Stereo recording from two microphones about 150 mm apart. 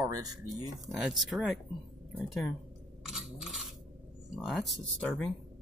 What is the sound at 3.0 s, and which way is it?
Coin, 5° right (ahead or behind).